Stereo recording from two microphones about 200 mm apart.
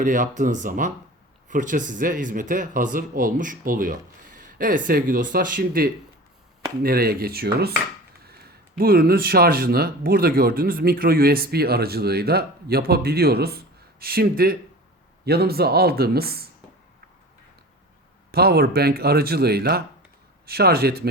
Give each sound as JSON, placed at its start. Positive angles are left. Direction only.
{"t": 0.0, "sound": "speech", "side_deg": -40}
{"t": 8.8, "sound": "speech", "side_deg": -50}
{"t": 18.3, "sound": "speech", "side_deg": -50}